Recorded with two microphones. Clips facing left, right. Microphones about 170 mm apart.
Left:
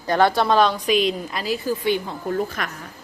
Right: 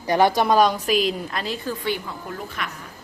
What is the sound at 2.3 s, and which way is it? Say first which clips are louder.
Speech: left 9 dB; 45° left (ahead or behind).